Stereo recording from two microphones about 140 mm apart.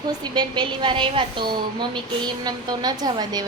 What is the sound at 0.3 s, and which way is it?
A woman's voice, 35° right (ahead or behind).